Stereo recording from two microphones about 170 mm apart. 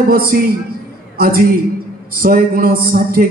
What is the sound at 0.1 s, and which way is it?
A man's voice, 60° right (ahead or behind).